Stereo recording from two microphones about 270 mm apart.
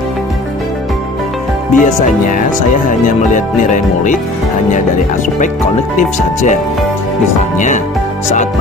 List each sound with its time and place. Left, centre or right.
1.7 s music: left
5.9 s music: left